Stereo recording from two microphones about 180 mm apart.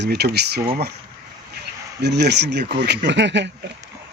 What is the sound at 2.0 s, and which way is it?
Speech, 70° right (ahead or behind).